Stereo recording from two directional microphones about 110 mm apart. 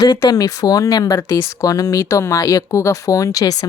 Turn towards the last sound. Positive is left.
turn(degrees=30)  # may be behind; listen again after turning